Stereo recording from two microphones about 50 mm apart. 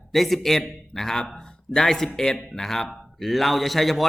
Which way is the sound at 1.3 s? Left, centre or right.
Centre.